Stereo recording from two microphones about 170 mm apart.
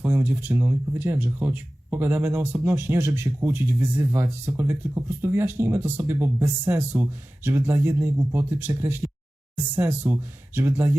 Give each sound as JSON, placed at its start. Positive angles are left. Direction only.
{"t": 0.3, "sound": "speech", "side_deg": -15}